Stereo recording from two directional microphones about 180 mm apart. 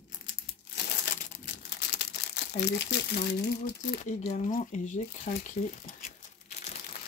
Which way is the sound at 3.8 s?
45° left (ahead or behind).